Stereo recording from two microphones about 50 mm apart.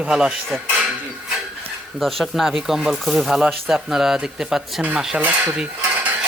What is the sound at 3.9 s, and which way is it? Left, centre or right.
Speech, centre.